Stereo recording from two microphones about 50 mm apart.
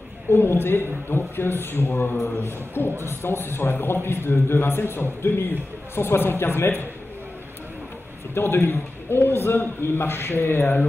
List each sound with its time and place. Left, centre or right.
0.3 s a man's voice: left
8.4 s a man's voice: left